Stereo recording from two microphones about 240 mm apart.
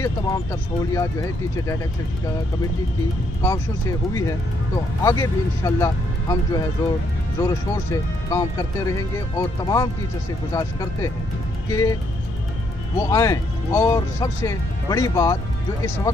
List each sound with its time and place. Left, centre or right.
0.0 s speech: centre
5.0 s speech: centre